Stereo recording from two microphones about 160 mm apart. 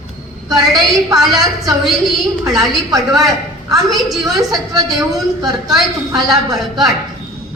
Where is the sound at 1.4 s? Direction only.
20° right (ahead or behind).